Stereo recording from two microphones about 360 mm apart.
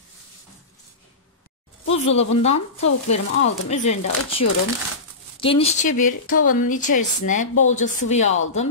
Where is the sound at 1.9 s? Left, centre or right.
Centre.